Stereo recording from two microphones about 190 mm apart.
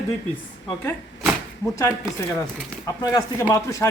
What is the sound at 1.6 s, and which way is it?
Speech, 15° left (ahead or behind).